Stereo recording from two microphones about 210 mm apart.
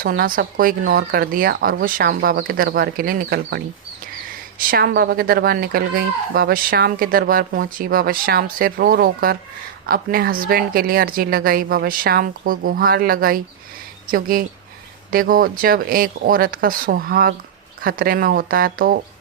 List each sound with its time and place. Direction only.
0.0 s speech: 45° right (ahead or behind)